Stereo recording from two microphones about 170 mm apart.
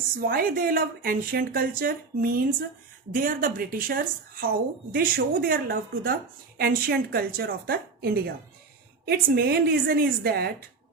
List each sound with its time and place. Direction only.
0.2 s a woman's voice: 60° right (ahead or behind)